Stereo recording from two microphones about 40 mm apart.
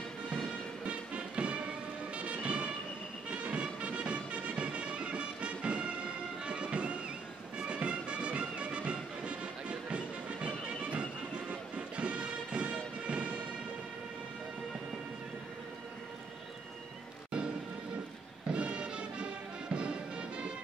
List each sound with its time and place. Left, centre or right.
0.8 s music: right
18.5 s music: right